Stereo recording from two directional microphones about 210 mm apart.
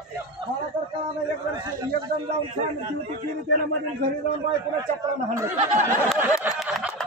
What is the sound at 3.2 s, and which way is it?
Speech, 50° right (ahead or behind).